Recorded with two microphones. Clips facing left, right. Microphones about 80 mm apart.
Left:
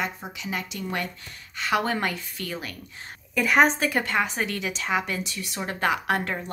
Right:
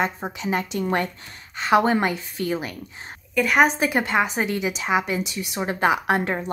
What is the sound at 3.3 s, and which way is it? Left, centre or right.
Speech, centre.